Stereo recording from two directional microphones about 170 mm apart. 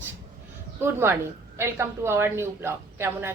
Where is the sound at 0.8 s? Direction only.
15° right (ahead or behind).